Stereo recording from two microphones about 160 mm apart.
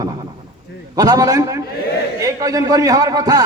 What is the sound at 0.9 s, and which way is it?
A man's voice, 20° right (ahead or behind).